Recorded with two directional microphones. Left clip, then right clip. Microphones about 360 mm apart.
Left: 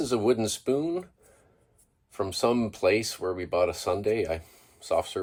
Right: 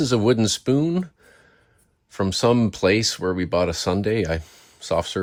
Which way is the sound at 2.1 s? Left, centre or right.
Right.